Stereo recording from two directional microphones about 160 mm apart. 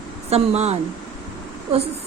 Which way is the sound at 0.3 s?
40° right (ahead or behind).